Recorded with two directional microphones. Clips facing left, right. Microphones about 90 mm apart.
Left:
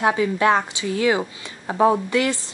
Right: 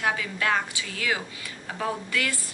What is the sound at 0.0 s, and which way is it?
Speech, 25° left (ahead or behind).